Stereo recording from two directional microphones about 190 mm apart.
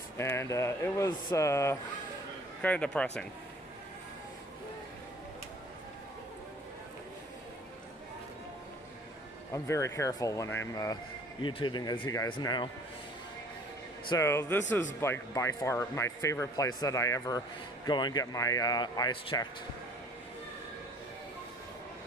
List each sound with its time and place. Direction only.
0.2 s a man's voice: 15° left (ahead or behind)
9.5 s speech: 15° left (ahead or behind)
14.1 s speech: 15° left (ahead or behind)